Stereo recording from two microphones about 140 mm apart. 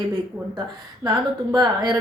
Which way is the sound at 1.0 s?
30° right (ahead or behind).